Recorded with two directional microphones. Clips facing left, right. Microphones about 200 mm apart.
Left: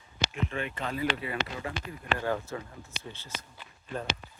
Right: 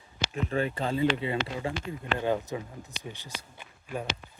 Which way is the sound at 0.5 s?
35° right (ahead or behind).